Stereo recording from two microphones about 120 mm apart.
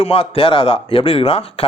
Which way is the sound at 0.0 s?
55° left (ahead or behind).